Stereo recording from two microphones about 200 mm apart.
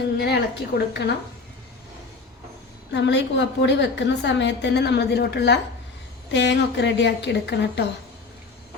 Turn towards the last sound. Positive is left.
turn(degrees=60)  # may be behind; listen again after turning